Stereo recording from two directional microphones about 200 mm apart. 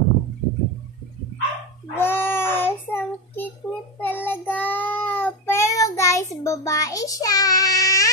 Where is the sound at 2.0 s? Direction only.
10° left (ahead or behind).